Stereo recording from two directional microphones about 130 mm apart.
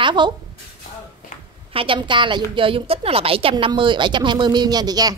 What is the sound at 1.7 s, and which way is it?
A woman's voice, 40° right (ahead or behind).